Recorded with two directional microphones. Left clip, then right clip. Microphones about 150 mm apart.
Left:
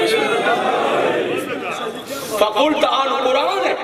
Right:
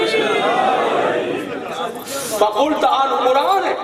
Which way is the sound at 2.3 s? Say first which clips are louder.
Even; 15° left (ahead or behind).